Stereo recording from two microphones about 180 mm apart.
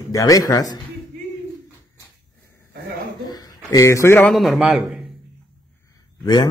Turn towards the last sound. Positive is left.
turn(degrees=25)  # may be behind; listen again after turning